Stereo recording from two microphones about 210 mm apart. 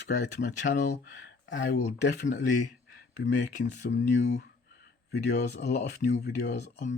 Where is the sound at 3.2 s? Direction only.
55° left (ahead or behind).